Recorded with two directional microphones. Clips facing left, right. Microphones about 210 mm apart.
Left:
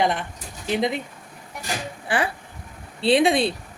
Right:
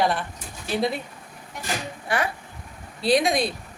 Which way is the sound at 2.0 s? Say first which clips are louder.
Left 2 dB; 30° left (ahead or behind).